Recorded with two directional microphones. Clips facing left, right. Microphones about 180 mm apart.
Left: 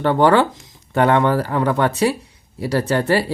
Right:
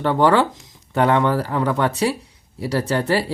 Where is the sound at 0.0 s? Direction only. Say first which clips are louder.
Left 2 dB; 55° left (ahead or behind).